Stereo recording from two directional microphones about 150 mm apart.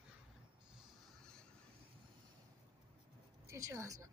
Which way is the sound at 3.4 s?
20° right (ahead or behind).